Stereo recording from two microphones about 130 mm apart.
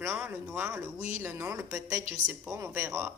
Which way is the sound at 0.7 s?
25° right (ahead or behind).